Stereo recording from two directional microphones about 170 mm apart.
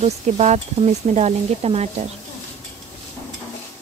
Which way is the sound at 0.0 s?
40° right (ahead or behind).